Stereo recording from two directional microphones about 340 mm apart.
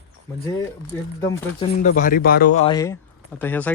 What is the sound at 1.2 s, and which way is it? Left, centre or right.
Speech, centre.